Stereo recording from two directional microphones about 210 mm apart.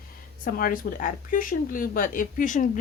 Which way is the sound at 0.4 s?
45° left (ahead or behind).